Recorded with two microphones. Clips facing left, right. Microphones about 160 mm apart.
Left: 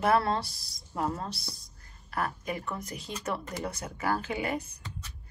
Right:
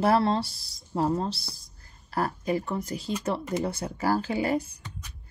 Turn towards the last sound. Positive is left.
turn(degrees=-35)  # may be behind; listen again after turning